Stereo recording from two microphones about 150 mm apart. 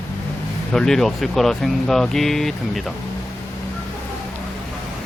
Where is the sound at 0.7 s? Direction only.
5° left (ahead or behind).